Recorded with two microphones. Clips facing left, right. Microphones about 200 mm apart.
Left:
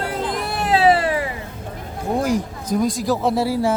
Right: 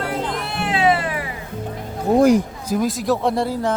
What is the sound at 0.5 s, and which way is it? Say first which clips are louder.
Music: left 3 dB; 40° left (ahead or behind).